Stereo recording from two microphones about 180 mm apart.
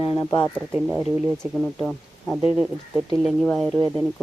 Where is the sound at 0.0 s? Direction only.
25° left (ahead or behind).